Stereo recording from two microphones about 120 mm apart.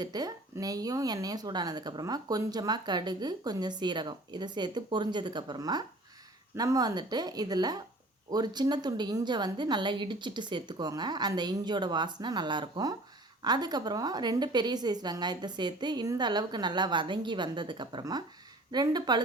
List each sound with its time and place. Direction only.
0.0 s a woman's voice: 35° right (ahead or behind)